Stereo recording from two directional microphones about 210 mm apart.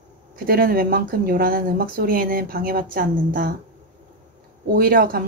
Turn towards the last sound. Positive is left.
turn(degrees=-45)  # may be behind; listen again after turning